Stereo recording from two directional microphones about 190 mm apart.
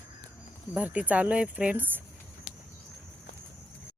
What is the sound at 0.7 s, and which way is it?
Speech, 5° right (ahead or behind).